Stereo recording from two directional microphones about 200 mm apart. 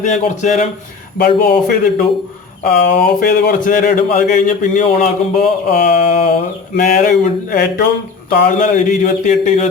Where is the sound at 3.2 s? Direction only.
45° left (ahead or behind).